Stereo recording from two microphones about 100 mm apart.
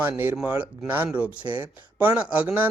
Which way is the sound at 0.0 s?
20° right (ahead or behind).